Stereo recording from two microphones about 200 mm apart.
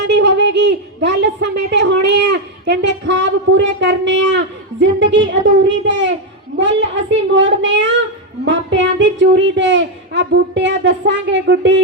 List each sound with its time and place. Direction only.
0.1 s a woman's voice: 60° right (ahead or behind)